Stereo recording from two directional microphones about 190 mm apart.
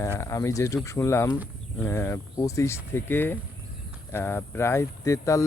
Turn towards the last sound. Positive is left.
turn(degrees=15)  # may be behind; listen again after turning